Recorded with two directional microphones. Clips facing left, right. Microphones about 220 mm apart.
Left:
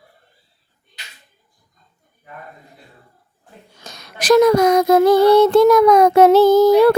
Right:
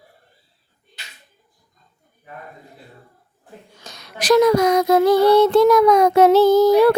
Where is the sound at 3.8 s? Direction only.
45° left (ahead or behind).